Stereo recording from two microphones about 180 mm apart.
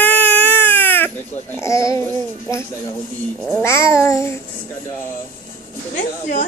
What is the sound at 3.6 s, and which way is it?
Cat, 15° left (ahead or behind).